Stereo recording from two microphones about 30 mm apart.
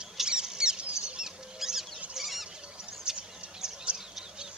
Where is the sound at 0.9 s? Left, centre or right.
Right.